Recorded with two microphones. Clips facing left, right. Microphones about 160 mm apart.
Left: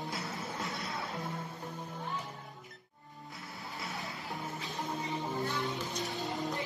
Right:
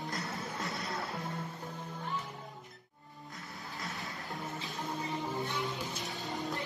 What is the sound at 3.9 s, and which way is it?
Music, centre (ahead or behind).